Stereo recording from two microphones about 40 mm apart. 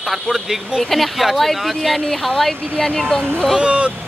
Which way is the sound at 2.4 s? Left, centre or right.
Centre.